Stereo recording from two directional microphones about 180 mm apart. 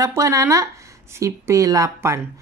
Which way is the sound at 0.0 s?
15° right (ahead or behind).